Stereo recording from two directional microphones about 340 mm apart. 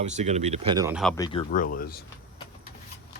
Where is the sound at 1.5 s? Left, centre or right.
Left.